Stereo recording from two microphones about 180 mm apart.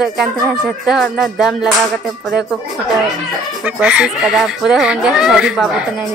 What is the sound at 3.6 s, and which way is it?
A woman's voice, 5° right (ahead or behind).